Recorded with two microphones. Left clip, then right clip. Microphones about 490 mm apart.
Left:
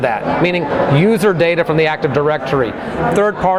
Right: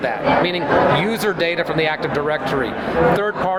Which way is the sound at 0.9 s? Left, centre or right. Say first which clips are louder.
Left 6 dB; left.